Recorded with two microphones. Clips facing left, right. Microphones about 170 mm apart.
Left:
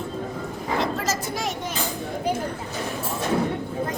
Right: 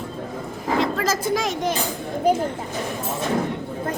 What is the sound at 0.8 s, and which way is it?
Speech, 90° right.